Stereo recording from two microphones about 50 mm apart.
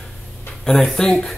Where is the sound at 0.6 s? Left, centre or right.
Centre.